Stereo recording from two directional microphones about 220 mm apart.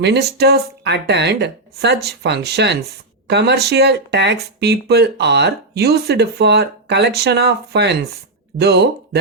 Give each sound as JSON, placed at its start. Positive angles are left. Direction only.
{"t": 0.0, "sound": "speech", "side_deg": -50}